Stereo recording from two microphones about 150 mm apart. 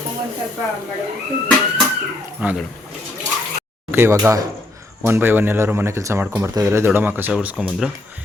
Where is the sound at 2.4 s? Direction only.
5° right (ahead or behind).